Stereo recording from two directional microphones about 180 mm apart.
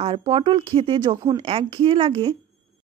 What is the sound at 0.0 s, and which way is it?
Speech, 30° right (ahead or behind).